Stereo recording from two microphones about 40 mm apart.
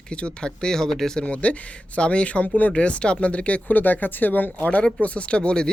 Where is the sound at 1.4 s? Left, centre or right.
Left.